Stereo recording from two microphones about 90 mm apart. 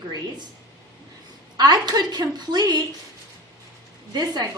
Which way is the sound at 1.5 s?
50° right (ahead or behind).